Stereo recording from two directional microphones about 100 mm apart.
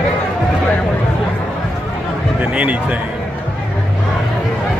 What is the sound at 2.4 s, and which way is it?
Speech, 15° right (ahead or behind).